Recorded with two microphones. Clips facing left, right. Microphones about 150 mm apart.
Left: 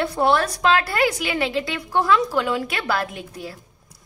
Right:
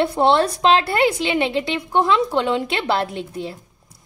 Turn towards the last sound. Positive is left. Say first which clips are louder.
# right 6 dB
turn(degrees=-25)  # may be behind; listen again after turning